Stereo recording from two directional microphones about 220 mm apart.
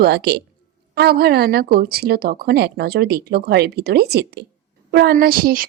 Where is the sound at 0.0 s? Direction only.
50° right (ahead or behind).